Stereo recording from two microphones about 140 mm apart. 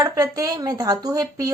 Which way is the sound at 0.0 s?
25° right (ahead or behind).